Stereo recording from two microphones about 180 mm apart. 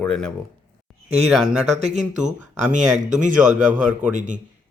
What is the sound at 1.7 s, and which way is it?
Speech, 40° right (ahead or behind).